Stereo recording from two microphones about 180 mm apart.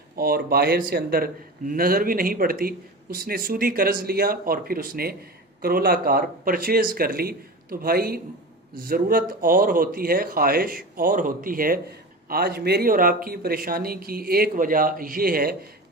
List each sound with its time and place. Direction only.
0.2 s a man's voice: 55° right (ahead or behind)